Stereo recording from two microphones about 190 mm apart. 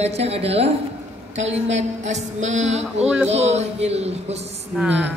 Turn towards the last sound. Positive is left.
turn(degrees=-10)  # may be behind; listen again after turning